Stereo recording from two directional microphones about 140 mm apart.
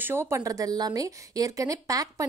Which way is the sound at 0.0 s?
20° right (ahead or behind).